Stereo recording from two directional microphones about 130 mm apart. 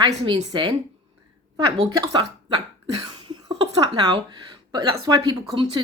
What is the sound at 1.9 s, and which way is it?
A woman's voice, 30° right (ahead or behind).